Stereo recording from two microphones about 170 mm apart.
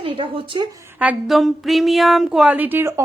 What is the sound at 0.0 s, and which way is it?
A woman's voice, 30° right (ahead or behind).